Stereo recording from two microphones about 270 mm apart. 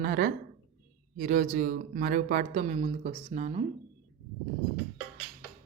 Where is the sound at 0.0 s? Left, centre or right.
Right.